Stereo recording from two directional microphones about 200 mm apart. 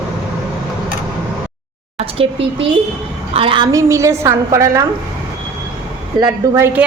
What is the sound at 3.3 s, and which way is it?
A woman's voice, 25° right (ahead or behind).